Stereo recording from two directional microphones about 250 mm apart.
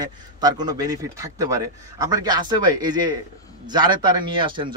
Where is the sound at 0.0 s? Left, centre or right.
Centre.